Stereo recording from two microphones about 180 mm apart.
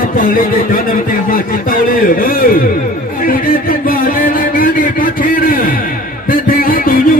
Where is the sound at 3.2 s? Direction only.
50° left (ahead or behind).